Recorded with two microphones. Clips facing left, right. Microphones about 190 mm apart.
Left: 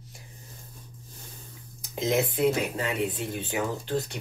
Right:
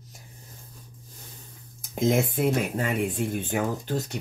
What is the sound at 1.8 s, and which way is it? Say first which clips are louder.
Speech: right 2 dB; 50° right (ahead or behind).